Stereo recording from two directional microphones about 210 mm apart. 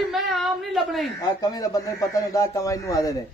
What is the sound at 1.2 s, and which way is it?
A man's voice, 15° left (ahead or behind).